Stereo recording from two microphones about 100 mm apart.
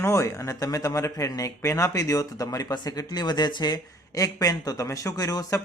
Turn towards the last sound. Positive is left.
turn(degrees=35)  # may be behind; listen again after turning